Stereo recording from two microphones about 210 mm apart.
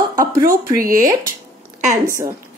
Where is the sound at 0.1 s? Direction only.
15° right (ahead or behind).